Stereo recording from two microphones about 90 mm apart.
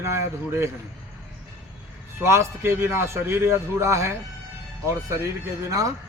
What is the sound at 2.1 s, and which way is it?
Speech, 30° right (ahead or behind).